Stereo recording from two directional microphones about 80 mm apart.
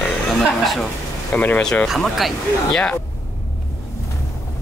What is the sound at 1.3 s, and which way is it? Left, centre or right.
Speech, left.